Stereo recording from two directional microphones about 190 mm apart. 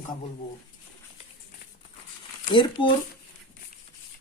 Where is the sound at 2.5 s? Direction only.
25° left (ahead or behind).